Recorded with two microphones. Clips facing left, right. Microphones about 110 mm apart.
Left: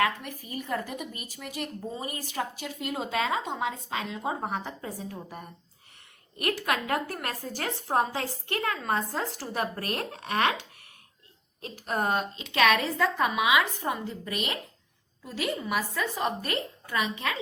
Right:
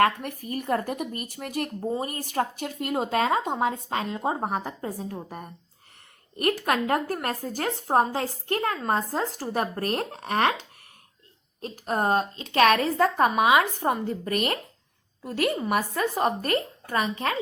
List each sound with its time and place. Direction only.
0.0 s a woman's voice: 50° right (ahead or behind)
6.3 s a woman's voice: 45° right (ahead or behind)
11.6 s speech: 35° right (ahead or behind)